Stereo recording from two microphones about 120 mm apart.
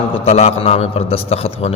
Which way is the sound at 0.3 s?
60° left (ahead or behind).